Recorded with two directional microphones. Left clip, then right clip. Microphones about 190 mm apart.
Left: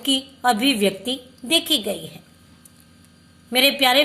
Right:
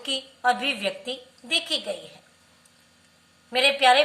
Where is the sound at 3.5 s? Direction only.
50° left (ahead or behind).